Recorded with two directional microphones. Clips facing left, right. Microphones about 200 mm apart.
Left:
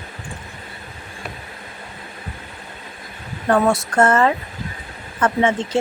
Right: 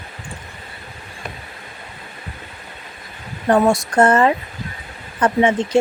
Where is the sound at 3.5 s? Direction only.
15° right (ahead or behind).